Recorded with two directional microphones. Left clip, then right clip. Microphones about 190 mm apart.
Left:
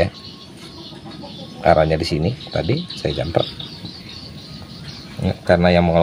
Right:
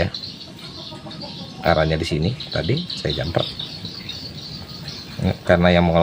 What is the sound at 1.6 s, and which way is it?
Speech, 5° left (ahead or behind).